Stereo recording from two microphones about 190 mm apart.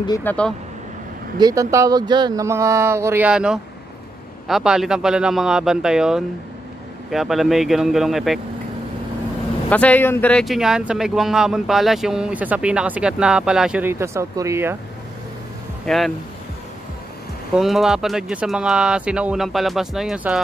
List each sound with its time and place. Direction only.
0.2 s speech: 5° left (ahead or behind)
1.4 s speech: 15° right (ahead or behind); by 8.4 s centre (ahead or behind)
9.7 s speech: 10° left (ahead or behind); by 14.8 s 15° right (ahead or behind)
15.8 s speech: centre (ahead or behind)
17.6 s speech: centre (ahead or behind)